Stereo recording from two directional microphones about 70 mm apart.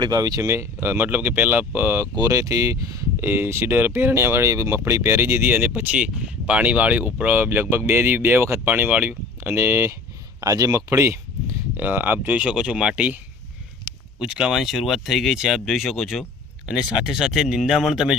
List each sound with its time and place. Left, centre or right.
0.0 s speech: right
2.3 s speech: right
3.2 s speech: right
8.6 s speech: right
9.6 s speech: right
10.4 s speech: right
10.8 s a sound: right
11.8 s speech: right
12.4 s speech: centre
14.2 s speech: centre